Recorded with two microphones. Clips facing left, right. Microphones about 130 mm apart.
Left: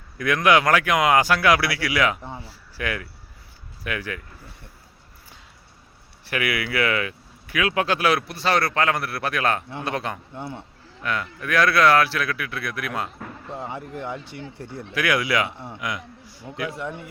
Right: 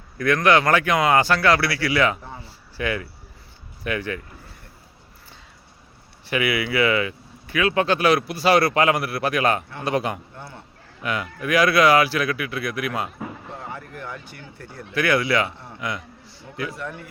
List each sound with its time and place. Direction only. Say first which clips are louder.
0.2 s speech: right 1 dB; 5° left (ahead or behind)
2.4 s a sound: right 3 dB; 5° left (ahead or behind)
3.8 s speech: right 4 dB; 5° left (ahead or behind)
6.2 s speech: right 3 dB; centre (ahead or behind)
10.3 s speech: left 6 dB; 25° left (ahead or behind)
11.0 s speech: right 2 dB; 5° right (ahead or behind)
13.6 s speech: left 7 dB; 20° left (ahead or behind)
14.9 s speech: right 2 dB; 10° left (ahead or behind)
16.2 s a sound: left 2 dB; 45° left (ahead or behind)
16.7 s speech: left 2 dB; 20° left (ahead or behind)